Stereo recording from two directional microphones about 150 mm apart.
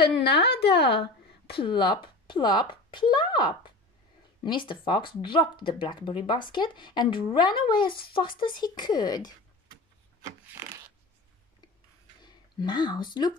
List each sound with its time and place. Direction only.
0.4 s a woman's voice: 90° left
1.5 s a woman's voice: 35° left (ahead or behind)
12.2 s speech: 30° left (ahead or behind)